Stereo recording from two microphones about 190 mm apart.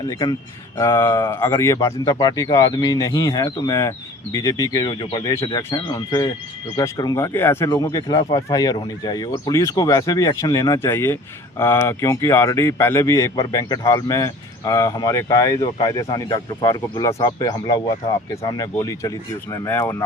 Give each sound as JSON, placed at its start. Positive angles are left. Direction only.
{"t": 0.1, "sound": "speech", "side_deg": 20}